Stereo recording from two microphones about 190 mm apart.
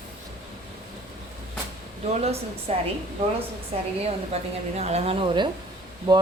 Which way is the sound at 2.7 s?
35° right (ahead or behind).